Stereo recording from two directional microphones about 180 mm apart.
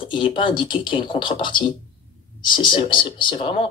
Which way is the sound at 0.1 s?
25° left (ahead or behind).